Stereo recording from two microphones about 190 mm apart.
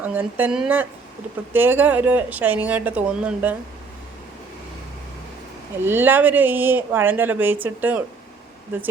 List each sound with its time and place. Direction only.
0.0 s speech: 10° right (ahead or behind)
5.8 s speech: 10° right (ahead or behind)